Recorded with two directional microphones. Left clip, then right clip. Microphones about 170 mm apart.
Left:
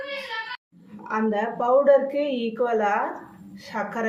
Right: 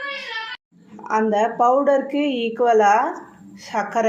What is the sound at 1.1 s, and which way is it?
Speech, 45° right (ahead or behind).